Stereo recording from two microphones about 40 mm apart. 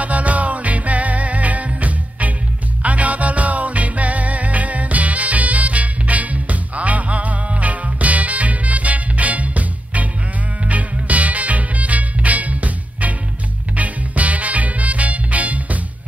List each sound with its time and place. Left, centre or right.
0.0 s music: right